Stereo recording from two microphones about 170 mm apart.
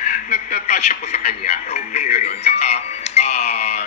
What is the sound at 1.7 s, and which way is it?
Speech, 35° left (ahead or behind).